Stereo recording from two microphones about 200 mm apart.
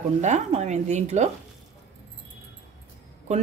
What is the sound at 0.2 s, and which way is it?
Speech, 35° right (ahead or behind).